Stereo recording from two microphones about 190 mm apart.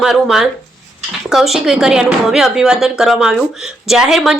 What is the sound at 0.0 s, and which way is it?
Speech, centre (ahead or behind).